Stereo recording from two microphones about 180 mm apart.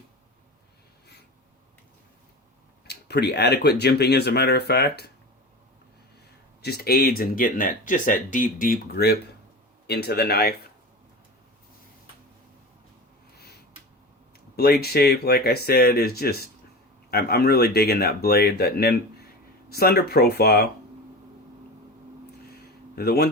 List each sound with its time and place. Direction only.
2.8 s speech: 65° left (ahead or behind)
6.6 s speech: 60° left (ahead or behind)
14.5 s speech: 60° left (ahead or behind)
23.0 s speech: 60° left (ahead or behind)